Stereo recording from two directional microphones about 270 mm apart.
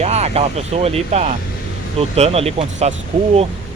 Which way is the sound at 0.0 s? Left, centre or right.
Right.